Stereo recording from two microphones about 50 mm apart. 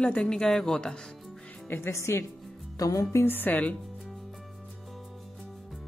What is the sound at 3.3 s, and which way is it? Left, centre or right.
Speech, left.